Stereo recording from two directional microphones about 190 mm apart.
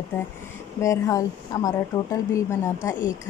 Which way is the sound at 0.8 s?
15° left (ahead or behind).